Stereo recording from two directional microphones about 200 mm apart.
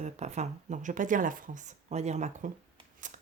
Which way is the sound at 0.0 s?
35° right (ahead or behind).